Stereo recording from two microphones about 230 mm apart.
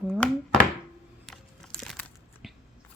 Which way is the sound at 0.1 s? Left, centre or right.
Centre.